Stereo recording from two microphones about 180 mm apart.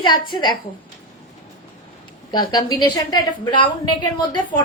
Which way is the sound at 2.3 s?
20° left (ahead or behind).